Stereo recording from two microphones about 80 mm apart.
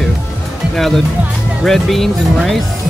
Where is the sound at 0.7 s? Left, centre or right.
Centre.